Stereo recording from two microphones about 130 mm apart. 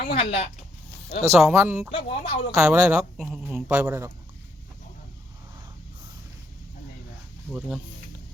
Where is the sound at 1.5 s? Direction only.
20° right (ahead or behind).